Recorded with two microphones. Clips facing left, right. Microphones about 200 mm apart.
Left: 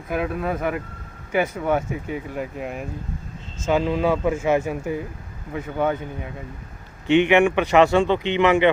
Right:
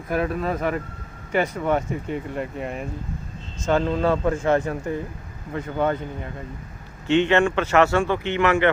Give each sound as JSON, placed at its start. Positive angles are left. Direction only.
{"t": 0.1, "sound": "speech", "side_deg": 0}